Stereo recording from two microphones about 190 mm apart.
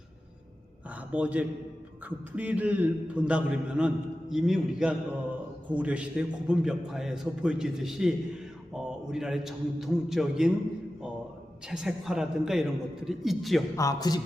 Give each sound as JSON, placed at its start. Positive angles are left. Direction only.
{"t": 1.1, "sound": "a man's voice", "side_deg": -10}
{"t": 11.7, "sound": "a man's voice", "side_deg": -5}
{"t": 13.7, "sound": "speech", "side_deg": 20}